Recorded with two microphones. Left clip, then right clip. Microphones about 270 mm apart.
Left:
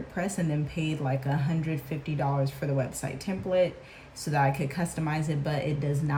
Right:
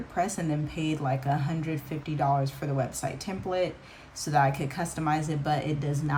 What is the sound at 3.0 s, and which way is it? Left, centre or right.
Speech, centre.